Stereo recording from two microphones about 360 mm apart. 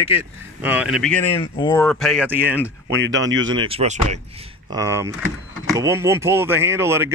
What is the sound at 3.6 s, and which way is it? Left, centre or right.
Speech, centre.